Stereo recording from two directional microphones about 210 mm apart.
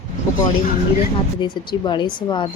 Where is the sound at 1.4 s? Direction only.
20° left (ahead or behind).